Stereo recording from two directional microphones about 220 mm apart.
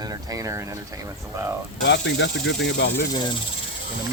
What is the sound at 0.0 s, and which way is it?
Speech, 15° right (ahead or behind).